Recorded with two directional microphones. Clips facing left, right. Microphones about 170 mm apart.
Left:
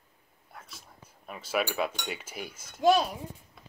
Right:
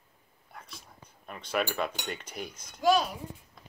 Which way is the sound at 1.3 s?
5° left (ahead or behind).